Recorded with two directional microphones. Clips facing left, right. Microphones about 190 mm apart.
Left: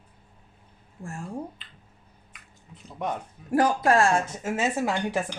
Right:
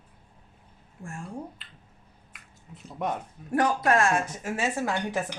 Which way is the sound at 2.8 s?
Centre (ahead or behind).